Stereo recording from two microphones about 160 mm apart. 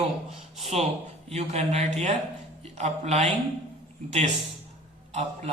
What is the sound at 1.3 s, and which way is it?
A man's voice, 40° right (ahead or behind).